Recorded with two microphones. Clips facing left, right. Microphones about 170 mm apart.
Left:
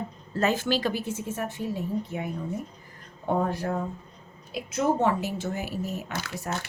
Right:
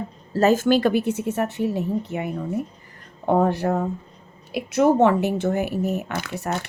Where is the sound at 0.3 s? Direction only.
40° right (ahead or behind).